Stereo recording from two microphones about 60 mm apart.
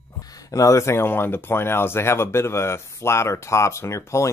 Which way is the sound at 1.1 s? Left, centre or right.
Left.